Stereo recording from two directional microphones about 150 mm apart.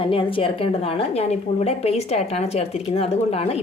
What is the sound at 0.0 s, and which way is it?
A woman's voice, 35° left (ahead or behind).